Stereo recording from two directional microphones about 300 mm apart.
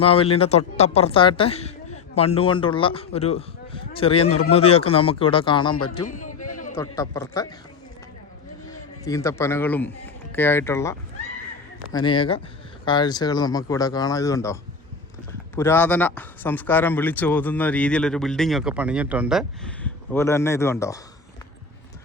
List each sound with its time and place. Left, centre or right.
0.0 s a woman's voice: centre
6.1 s a sound: left
6.7 s speech: centre
8.7 s a man's voice: centre